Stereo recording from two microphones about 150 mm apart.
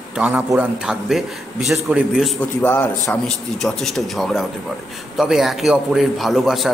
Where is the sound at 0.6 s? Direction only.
5° right (ahead or behind).